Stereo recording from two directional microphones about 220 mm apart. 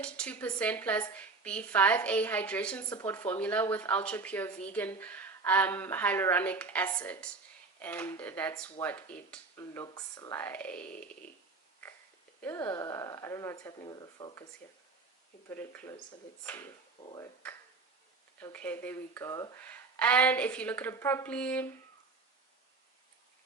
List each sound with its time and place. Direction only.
0.0 s speech: 5° left (ahead or behind)
12.4 s speech: 15° left (ahead or behind)
15.4 s speech: 10° left (ahead or behind)
17.0 s speech: 25° left (ahead or behind)
18.3 s speech: 5° left (ahead or behind)